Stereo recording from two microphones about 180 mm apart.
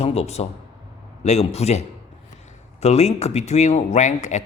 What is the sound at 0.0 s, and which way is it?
Speech, 35° left (ahead or behind).